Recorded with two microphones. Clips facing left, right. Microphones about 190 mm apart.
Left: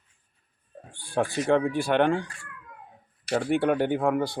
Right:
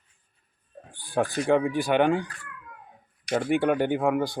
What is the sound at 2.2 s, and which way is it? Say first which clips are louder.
Speech: right 2 dB; 25° left (ahead or behind).